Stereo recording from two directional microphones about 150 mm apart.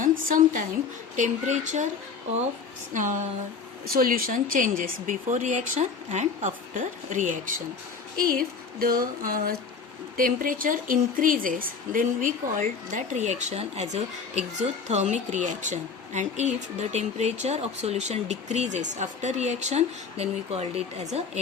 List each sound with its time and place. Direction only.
0.0 s a woman's voice: 65° right (ahead or behind)
1.1 s speech: 55° right (ahead or behind)
2.9 s speech: 60° right (ahead or behind)
3.9 s speech: 75° right (ahead or behind); by 7.3 s 55° right (ahead or behind)
8.1 s speech: 75° right (ahead or behind); by 21.4 s 50° right (ahead or behind)